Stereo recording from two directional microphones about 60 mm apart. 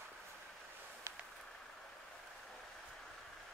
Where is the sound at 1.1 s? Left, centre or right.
Right.